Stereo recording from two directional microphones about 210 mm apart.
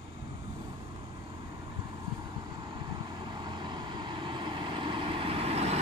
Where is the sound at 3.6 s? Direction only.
20° right (ahead or behind).